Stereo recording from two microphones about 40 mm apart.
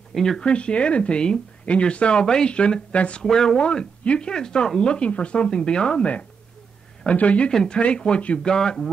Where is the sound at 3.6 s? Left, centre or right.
Left.